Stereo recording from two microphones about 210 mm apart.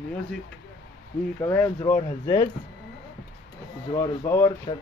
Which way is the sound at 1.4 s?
10° left (ahead or behind).